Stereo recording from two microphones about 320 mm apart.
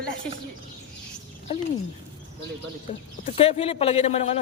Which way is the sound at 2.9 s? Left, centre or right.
Centre.